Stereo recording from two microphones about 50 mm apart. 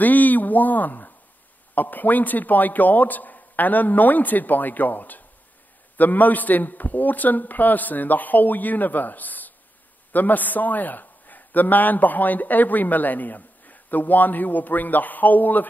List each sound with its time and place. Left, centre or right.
0.0 s a man's voice: left